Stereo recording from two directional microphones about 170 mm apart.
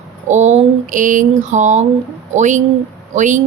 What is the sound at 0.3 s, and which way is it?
Speech, 45° right (ahead or behind).